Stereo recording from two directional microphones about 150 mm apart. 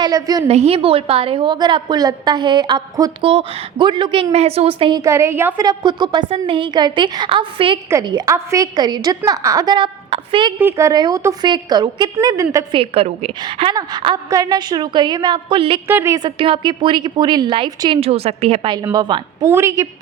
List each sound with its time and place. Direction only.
0.0 s a woman's voice: 25° right (ahead or behind)
0.4 s a woman's voice: 45° right (ahead or behind)
4.9 s a woman's voice: 20° right (ahead or behind)
5.6 s a woman's voice: 30° right (ahead or behind)
10.6 s a woman's voice: 15° right (ahead or behind)
12.8 s a woman's voice: 40° right (ahead or behind)
15.9 s a woman's voice: 15° right (ahead or behind)
19.5 s a woman's voice: 20° right (ahead or behind)